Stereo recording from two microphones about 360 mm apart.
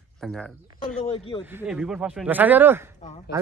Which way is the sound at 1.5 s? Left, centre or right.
Centre.